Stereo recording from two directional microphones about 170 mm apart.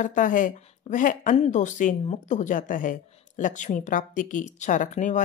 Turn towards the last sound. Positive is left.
turn(degrees=45)  # may be behind; listen again after turning